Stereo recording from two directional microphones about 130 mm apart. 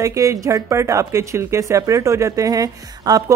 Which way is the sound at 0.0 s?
25° right (ahead or behind).